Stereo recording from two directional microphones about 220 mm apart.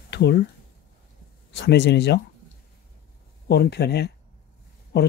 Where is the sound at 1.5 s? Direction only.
50° left (ahead or behind).